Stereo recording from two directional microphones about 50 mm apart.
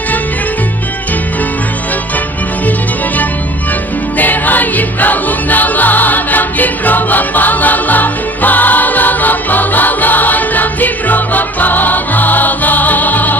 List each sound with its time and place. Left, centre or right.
4.2 s music: left